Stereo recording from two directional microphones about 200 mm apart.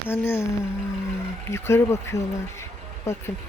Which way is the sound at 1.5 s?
15° left (ahead or behind).